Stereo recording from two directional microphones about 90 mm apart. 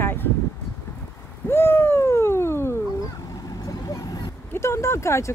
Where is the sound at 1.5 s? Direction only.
25° left (ahead or behind).